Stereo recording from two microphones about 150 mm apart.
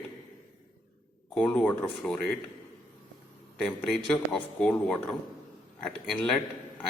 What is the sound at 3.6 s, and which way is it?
A man's voice, centre (ahead or behind).